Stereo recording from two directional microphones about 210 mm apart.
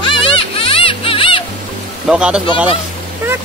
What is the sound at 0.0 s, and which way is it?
Music, 25° left (ahead or behind).